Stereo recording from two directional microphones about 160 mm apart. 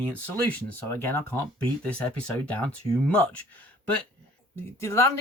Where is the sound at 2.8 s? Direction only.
25° right (ahead or behind).